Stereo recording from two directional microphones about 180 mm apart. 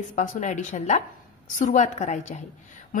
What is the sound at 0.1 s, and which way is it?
A woman's voice, 45° left (ahead or behind).